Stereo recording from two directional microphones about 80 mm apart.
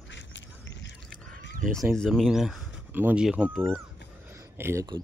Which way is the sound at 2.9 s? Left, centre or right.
Right.